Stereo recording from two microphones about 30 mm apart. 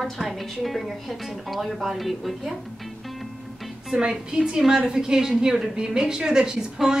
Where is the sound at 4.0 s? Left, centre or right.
Right.